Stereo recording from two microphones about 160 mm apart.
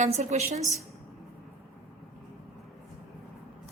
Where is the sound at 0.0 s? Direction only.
45° right (ahead or behind).